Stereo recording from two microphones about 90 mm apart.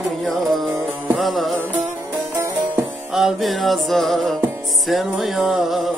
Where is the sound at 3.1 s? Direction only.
5° right (ahead or behind).